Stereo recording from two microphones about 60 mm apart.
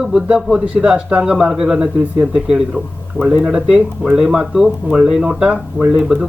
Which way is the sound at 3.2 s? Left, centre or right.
Right.